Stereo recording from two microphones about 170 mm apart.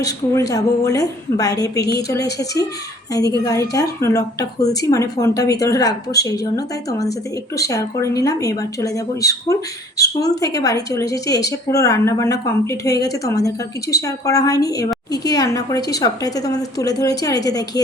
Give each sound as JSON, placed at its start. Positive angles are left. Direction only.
{"t": 0.0, "sound": "a woman's voice", "side_deg": 20}